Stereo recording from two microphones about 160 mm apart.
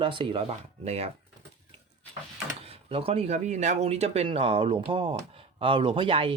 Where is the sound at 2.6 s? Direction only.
35° right (ahead or behind).